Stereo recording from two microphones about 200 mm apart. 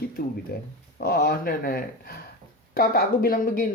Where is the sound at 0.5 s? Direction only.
50° left (ahead or behind).